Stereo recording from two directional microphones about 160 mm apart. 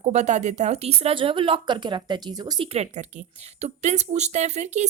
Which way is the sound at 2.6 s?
45° right (ahead or behind).